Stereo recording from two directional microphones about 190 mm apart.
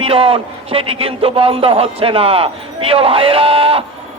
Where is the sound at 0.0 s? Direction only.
30° right (ahead or behind).